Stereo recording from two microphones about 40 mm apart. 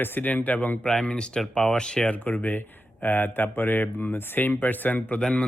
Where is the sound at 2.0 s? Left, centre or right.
Left.